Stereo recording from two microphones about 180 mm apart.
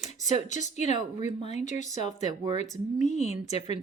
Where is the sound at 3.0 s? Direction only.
40° left (ahead or behind).